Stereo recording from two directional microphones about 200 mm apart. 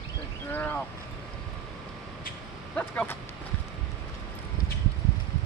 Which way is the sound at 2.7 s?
5° left (ahead or behind).